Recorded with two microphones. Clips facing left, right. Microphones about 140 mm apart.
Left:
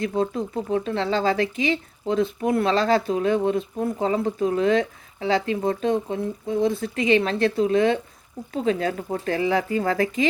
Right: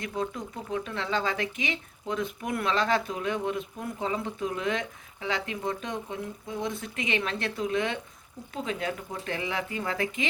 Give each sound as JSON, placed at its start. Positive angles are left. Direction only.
{"t": 0.0, "sound": "speech", "side_deg": 30}